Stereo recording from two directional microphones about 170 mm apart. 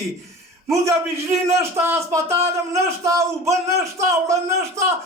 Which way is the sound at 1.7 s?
15° right (ahead or behind).